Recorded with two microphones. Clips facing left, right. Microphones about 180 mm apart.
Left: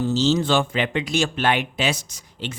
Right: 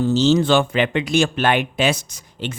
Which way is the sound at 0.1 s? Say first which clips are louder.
Right 5 dB; 60° right (ahead or behind).